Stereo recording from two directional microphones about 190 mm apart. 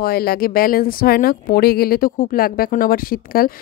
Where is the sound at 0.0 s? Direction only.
55° left (ahead or behind).